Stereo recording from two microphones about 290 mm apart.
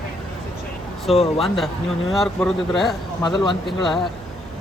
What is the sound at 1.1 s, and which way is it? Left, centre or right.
Speech, left.